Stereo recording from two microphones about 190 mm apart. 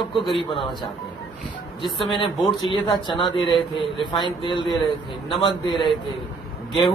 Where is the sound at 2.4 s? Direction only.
25° left (ahead or behind).